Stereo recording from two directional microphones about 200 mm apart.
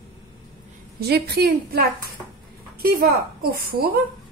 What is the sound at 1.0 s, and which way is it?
Speech, 55° right (ahead or behind).